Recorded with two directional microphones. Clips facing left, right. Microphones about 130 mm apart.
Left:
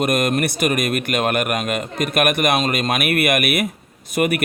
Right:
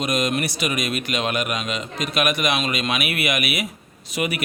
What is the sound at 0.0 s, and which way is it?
Speech, 55° left (ahead or behind).